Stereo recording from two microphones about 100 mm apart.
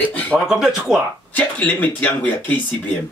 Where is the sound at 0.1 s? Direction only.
15° left (ahead or behind).